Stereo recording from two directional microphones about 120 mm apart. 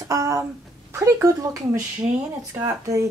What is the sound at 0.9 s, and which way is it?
Speech, 25° right (ahead or behind).